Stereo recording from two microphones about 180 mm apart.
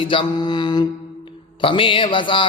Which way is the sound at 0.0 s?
30° left (ahead or behind).